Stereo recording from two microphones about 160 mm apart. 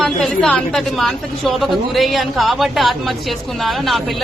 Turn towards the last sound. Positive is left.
turn(degrees=0)  # may be behind; listen again after turning